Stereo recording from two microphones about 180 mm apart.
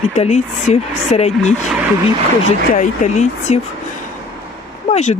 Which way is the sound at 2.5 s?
40° left (ahead or behind).